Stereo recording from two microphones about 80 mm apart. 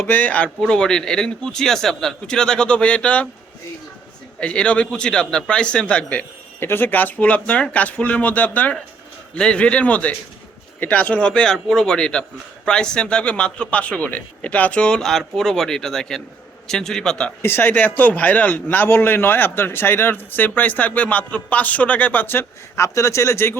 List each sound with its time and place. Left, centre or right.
0.0 s a man's voice: left
4.4 s a man's voice: centre
6.6 s a man's voice: left; by 17.3 s centre
17.4 s a man's voice: left